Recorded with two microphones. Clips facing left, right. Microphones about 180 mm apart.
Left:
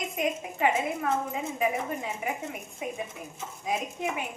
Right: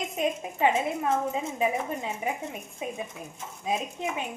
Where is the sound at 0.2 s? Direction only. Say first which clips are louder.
Right 2 dB; 25° right (ahead or behind).